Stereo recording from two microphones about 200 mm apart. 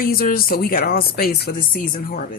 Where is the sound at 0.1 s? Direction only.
45° left (ahead or behind).